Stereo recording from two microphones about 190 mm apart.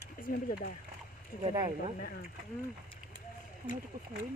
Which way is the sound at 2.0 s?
55° left (ahead or behind).